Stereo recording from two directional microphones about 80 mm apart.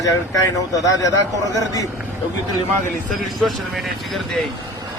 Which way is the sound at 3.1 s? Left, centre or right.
Centre.